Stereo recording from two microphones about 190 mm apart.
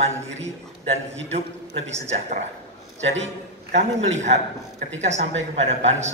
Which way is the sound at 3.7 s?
40° right (ahead or behind).